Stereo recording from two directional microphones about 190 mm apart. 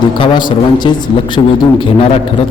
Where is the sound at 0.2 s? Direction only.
25° left (ahead or behind).